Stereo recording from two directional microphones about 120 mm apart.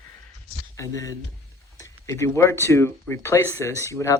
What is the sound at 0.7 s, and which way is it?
Speech, 25° left (ahead or behind).